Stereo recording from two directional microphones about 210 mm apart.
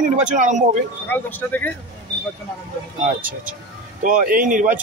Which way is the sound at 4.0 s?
40° right (ahead or behind).